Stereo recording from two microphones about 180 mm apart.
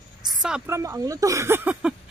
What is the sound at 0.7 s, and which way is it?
Speech, 15° right (ahead or behind).